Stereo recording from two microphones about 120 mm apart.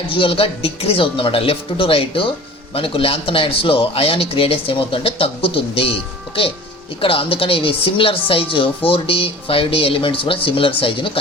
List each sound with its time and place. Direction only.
0.1 s speech: 45° left (ahead or behind)